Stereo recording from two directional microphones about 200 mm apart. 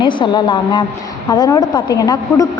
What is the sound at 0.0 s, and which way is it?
A woman's voice, 25° left (ahead or behind).